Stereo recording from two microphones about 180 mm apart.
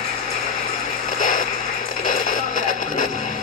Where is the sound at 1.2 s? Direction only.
50° left (ahead or behind).